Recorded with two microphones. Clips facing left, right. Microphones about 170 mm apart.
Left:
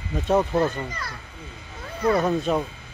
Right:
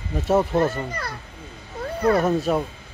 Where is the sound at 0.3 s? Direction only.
5° right (ahead or behind).